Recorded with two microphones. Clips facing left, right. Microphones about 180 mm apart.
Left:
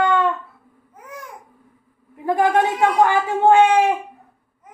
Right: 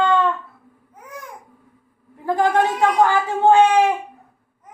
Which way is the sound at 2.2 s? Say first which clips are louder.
Left 1 dB; 20° left (ahead or behind).